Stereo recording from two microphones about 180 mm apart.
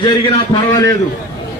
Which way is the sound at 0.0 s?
25° left (ahead or behind).